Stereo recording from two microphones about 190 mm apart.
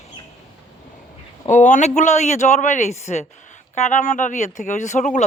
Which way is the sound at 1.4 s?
40° left (ahead or behind).